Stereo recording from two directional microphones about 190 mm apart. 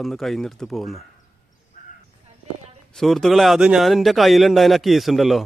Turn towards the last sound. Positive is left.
turn(degrees=0)  # may be behind; listen again after turning